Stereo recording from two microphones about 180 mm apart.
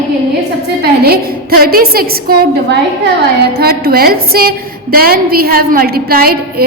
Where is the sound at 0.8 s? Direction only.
60° right (ahead or behind).